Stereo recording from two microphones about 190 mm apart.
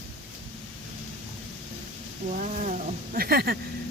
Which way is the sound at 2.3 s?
40° right (ahead or behind).